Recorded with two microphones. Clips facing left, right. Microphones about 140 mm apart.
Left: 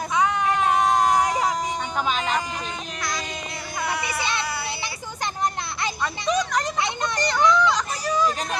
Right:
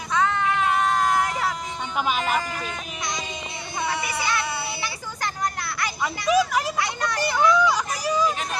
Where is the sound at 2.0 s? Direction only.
10° right (ahead or behind).